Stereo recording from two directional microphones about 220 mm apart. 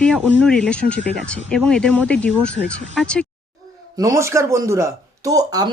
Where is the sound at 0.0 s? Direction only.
5° left (ahead or behind).